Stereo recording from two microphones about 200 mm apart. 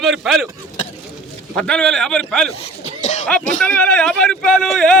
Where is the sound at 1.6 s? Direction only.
5° left (ahead or behind).